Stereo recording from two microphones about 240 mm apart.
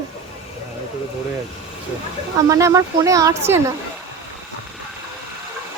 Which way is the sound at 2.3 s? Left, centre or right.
Centre.